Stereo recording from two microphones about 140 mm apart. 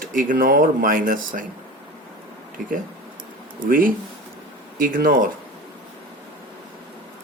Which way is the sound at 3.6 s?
80° right.